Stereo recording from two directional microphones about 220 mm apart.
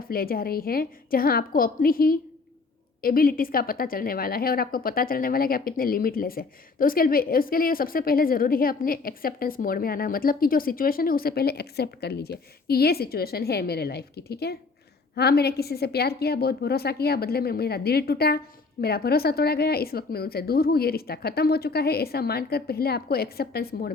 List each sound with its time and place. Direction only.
0.1 s a woman's voice: 40° left (ahead or behind)